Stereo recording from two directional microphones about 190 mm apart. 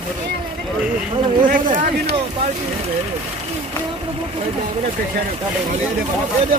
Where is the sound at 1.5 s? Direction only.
40° right (ahead or behind).